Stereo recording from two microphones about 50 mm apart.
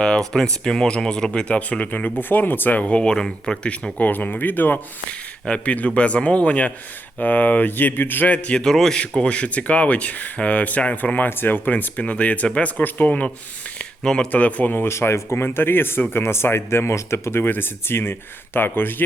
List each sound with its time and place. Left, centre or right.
0.0 s speech: centre
3.9 s speech: left
5.5 s speech: left
8.3 s speech: left
8.6 s speech: centre
9.0 s speech: left
14.0 s speech: centre
14.3 s speech: left
14.8 s speech: left
15.4 s speech: left
17.4 s speech: left